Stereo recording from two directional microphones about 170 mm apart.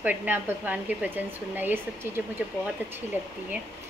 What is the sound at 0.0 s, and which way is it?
Speech, 10° right (ahead or behind).